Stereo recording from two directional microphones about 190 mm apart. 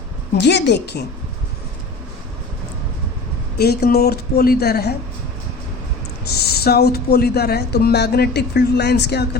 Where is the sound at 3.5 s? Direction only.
55° left (ahead or behind).